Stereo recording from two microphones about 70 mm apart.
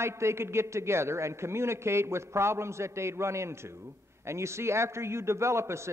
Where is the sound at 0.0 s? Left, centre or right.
Right.